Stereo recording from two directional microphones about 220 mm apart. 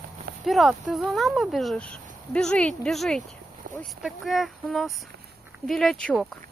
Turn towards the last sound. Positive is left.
turn(degrees=0)  # may be behind; listen again after turning